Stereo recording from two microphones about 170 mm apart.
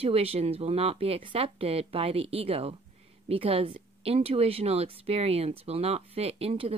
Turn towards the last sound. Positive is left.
turn(degrees=-35)  # may be behind; listen again after turning